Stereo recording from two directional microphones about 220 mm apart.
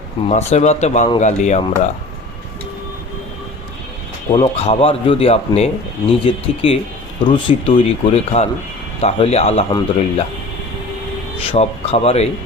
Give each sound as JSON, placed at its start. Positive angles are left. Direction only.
{"t": 0.3, "sound": "speech", "side_deg": 30}
{"t": 4.3, "sound": "speech", "side_deg": 25}
{"t": 11.4, "sound": "speech", "side_deg": 25}